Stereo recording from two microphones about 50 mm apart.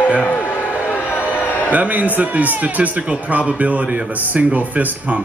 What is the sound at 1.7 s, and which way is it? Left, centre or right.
A man's voice, right.